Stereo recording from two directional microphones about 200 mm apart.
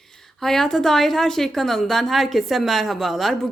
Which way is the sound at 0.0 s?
Centre (ahead or behind).